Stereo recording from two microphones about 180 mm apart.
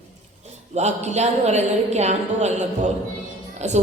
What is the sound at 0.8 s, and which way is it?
A woman's voice, 40° right (ahead or behind).